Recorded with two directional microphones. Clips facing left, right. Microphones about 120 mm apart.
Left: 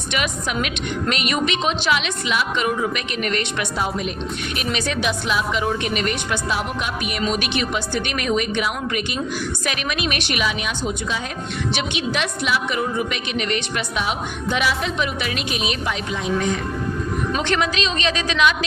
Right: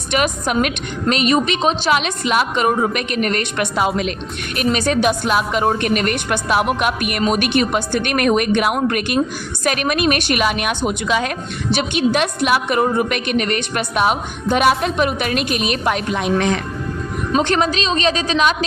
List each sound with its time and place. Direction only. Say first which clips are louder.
0.1 s a woman's voice: right 6 dB; 45° right (ahead or behind)
1.0 s a woman's voice: right 7 dB; 30° right (ahead or behind)
3.8 s a woman's voice: right 6 dB; 90° right
4.5 s a woman's voice: right 9 dB; 45° right (ahead or behind); by 11.3 s 70° right (ahead or behind)
11.7 s a woman's voice: right 9 dB; 45° right (ahead or behind); by 16.6 s 80° right
17.3 s a woman's voice: right 7 dB; 40° right (ahead or behind)